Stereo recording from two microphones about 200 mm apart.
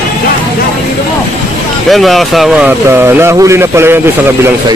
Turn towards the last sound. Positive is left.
turn(degrees=-10)  # may be behind; listen again after turning